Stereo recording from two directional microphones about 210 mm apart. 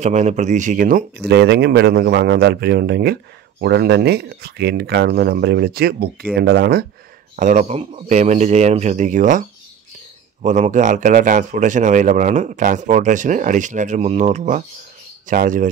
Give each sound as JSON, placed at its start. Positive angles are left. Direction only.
{"t": 0.0, "sound": "speech", "side_deg": -35}
{"t": 7.3, "sound": "speech", "side_deg": -35}
{"t": 10.4, "sound": "speech", "side_deg": -35}